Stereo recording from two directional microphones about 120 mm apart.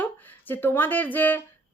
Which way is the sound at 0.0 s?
15° left (ahead or behind).